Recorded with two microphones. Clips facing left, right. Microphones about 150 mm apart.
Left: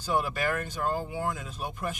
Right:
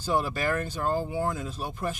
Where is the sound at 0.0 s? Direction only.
35° right (ahead or behind).